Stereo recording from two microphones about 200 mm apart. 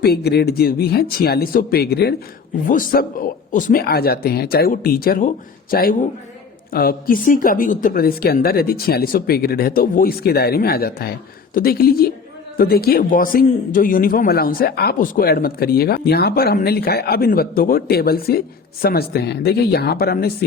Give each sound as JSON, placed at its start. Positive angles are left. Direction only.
{"t": 0.0, "sound": "speech", "side_deg": 50}